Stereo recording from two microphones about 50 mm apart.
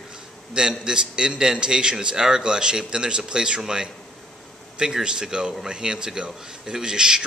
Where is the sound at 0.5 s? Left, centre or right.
Centre.